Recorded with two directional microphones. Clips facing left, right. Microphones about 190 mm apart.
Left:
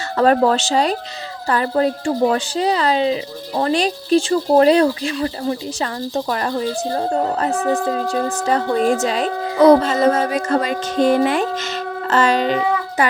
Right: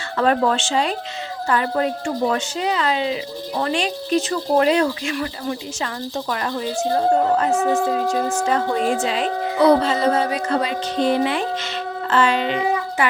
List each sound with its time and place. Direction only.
0.2 s a woman's voice: 40° left (ahead or behind)
7.8 s speech: 15° right (ahead or behind)
8.4 s a woman's voice: 40° left (ahead or behind)